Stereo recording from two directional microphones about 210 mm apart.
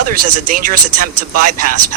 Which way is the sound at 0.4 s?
40° right (ahead or behind).